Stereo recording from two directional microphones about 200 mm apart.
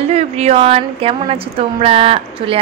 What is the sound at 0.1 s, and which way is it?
Speech, 30° right (ahead or behind).